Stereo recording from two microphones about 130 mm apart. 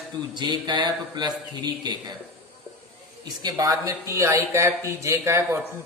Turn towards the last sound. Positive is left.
turn(degrees=-20)  # may be behind; listen again after turning